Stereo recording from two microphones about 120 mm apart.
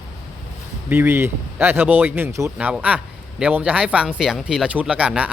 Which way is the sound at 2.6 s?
10° right (ahead or behind).